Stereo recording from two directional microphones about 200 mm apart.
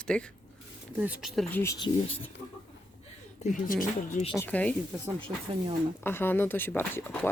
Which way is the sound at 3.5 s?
45° left (ahead or behind).